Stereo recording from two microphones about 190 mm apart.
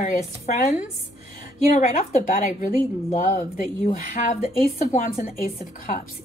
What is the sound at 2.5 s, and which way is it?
Speech, 40° left (ahead or behind).